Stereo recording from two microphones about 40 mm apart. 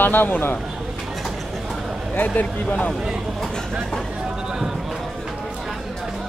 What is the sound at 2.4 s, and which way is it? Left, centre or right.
Speech, left.